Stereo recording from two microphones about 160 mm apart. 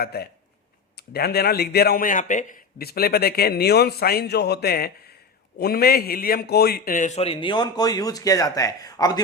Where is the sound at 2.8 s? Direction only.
75° left (ahead or behind).